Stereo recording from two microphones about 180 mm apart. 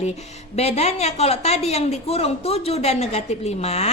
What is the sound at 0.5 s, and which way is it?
A woman's voice, 35° left (ahead or behind).